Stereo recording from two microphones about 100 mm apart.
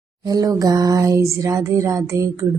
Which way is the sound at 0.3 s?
35° right (ahead or behind).